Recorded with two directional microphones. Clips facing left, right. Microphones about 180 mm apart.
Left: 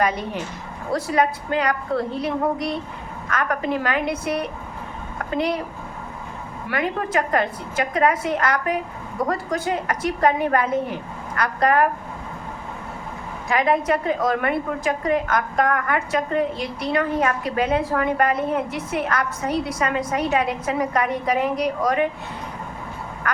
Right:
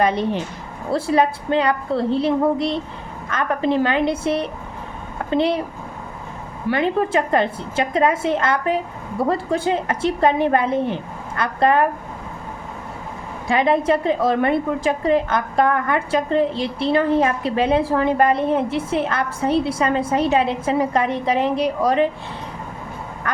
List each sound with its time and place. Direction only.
0.0 s a woman's voice: 25° right (ahead or behind)
6.7 s a woman's voice: 25° right (ahead or behind)
13.5 s a woman's voice: 25° right (ahead or behind)
23.3 s quack: 30° right (ahead or behind)